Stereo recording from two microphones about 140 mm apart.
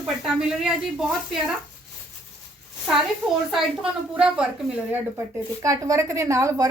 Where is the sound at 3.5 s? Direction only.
5° right (ahead or behind).